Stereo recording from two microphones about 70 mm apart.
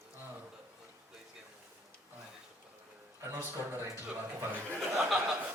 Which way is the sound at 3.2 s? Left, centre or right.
Right.